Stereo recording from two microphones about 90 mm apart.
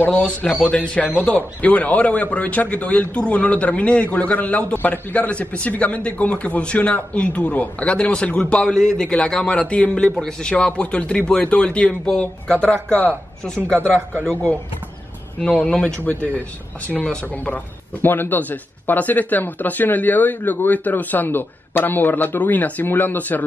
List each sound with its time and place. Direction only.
0.0 s a man's voice: 15° left (ahead or behind)